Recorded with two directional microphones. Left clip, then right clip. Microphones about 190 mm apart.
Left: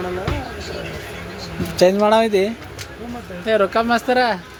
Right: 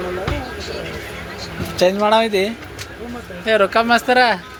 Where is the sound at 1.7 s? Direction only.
40° left (ahead or behind).